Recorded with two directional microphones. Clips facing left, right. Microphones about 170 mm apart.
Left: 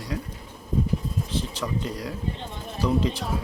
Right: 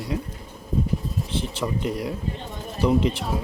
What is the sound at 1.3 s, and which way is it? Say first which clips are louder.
Speech: right 3 dB; 25° right (ahead or behind).